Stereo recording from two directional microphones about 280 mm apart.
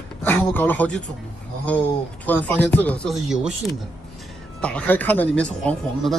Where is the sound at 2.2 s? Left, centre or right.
Centre.